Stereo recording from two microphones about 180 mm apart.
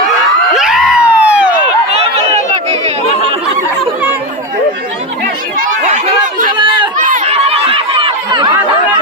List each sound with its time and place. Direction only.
0.5 s a sound: centre (ahead or behind)
1.9 s a sound: 35° right (ahead or behind)
5.5 s chatter: 45° right (ahead or behind)
6.6 s run: 25° right (ahead or behind)
6.9 s run: 45° right (ahead or behind)
7.3 s chatter: 35° right (ahead or behind)